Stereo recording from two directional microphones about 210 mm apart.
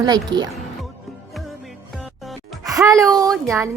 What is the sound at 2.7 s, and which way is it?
A woman's voice, 15° right (ahead or behind).